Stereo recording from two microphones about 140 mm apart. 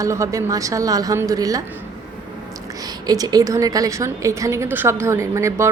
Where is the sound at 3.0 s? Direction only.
25° right (ahead or behind).